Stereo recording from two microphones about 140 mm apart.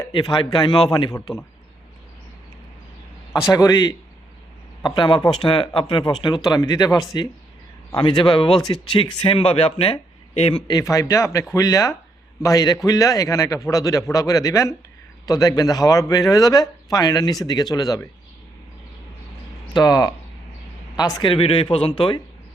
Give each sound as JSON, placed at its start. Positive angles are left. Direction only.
{"t": 0.1, "sound": "speech", "side_deg": 35}
{"t": 3.5, "sound": "speech", "side_deg": 30}
{"t": 4.9, "sound": "speech", "side_deg": 35}
{"t": 10.7, "sound": "speech", "side_deg": 25}
{"t": 19.7, "sound": "speech", "side_deg": 30}